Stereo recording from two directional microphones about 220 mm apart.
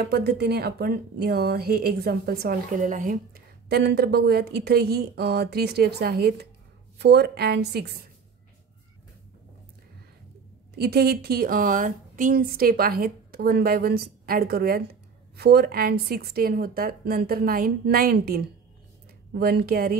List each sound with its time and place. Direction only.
0.1 s a woman's voice: 45° right (ahead or behind)
10.8 s a woman's voice: 45° right (ahead or behind)